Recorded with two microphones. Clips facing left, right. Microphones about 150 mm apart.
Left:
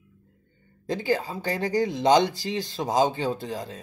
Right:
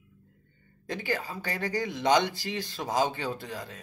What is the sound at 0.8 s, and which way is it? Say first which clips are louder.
Speech: left 6 dB; 30° left (ahead or behind).